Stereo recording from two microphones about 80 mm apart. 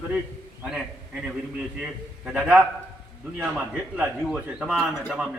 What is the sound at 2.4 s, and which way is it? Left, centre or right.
A man's voice, centre.